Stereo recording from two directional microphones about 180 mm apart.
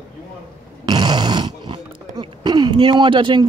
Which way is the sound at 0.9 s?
25° right (ahead or behind).